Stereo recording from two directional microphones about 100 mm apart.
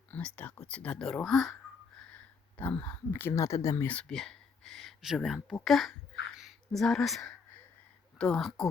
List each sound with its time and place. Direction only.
0.3 s speech: 15° left (ahead or behind)
2.1 s speech: 15° left (ahead or behind)
4.1 s speech: 5° left (ahead or behind)
6.3 s a sound: centre (ahead or behind)
8.2 s speech: 5° left (ahead or behind)